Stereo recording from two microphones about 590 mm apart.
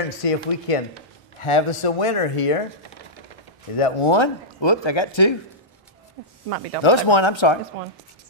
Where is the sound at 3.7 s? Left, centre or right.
Left.